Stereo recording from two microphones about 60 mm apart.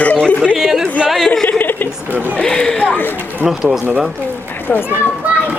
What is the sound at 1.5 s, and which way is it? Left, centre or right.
Chuckle, left.